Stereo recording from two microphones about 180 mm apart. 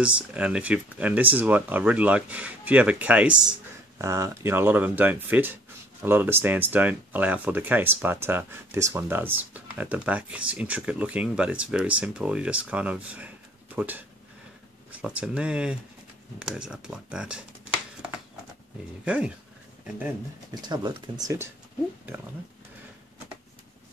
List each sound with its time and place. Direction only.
0.0 s speech: 5° right (ahead or behind)
19.0 s speech: 5° right (ahead or behind)
20.6 s speech: 20° right (ahead or behind)